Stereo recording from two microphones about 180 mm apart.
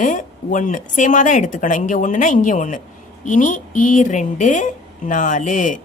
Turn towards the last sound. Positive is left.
turn(degrees=45)  # may be behind; listen again after turning